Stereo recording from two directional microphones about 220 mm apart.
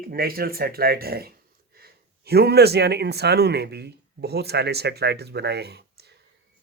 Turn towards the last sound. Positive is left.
turn(degrees=-50)  # may be behind; listen again after turning